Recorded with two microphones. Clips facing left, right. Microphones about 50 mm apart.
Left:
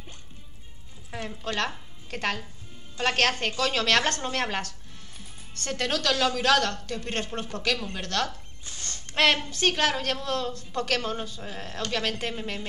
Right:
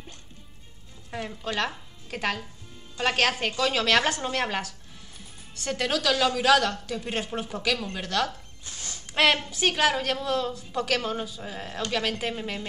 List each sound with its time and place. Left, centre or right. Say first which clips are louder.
1.1 s a woman's voice: right 1 dB; centre